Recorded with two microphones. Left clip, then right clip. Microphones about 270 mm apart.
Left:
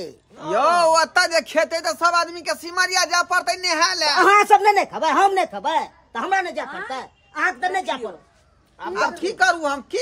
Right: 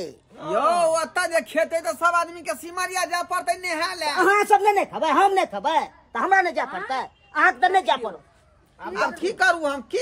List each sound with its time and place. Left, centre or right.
0.4 s a man's voice: left
4.2 s speech: centre
8.9 s speech: centre